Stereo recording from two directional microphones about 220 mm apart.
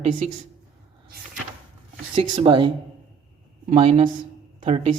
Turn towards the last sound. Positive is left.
turn(degrees=-25)  # may be behind; listen again after turning